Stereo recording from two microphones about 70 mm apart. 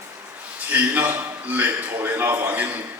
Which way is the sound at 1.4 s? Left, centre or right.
Right.